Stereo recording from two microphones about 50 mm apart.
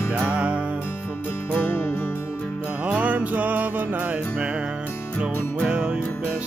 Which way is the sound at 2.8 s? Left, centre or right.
Right.